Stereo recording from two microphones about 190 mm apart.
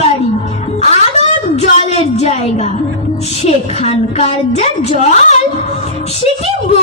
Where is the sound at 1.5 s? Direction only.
35° left (ahead or behind).